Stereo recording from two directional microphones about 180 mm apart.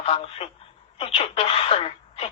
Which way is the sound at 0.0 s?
35° left (ahead or behind).